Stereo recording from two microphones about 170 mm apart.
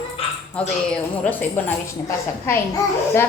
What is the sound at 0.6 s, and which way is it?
A woman's voice, 5° left (ahead or behind).